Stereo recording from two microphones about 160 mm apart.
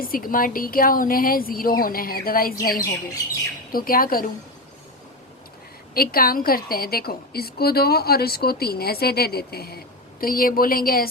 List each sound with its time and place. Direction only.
0.0 s a woman's voice: 65° left (ahead or behind)
5.9 s a woman's voice: 70° left (ahead or behind)